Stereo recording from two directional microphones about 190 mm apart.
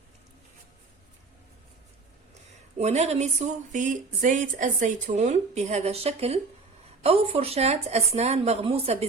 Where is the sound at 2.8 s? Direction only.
35° right (ahead or behind).